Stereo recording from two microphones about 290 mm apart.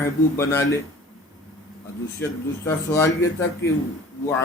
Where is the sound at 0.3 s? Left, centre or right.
Centre.